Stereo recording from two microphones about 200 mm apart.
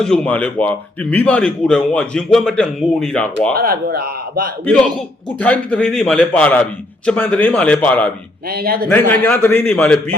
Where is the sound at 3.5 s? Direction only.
50° right (ahead or behind).